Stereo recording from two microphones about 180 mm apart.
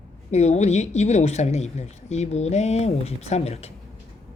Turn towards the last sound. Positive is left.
turn(degrees=35)  # may be behind; listen again after turning